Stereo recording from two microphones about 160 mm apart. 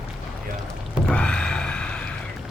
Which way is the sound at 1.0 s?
5° left (ahead or behind).